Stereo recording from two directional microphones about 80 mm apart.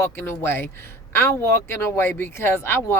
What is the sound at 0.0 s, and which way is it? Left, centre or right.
Speech, left.